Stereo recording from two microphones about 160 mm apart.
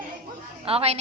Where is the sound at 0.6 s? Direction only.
40° right (ahead or behind).